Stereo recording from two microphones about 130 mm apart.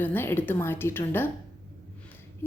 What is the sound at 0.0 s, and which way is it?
A woman's voice, 15° left (ahead or behind).